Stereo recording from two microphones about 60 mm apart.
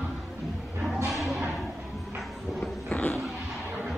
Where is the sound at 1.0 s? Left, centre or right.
Centre.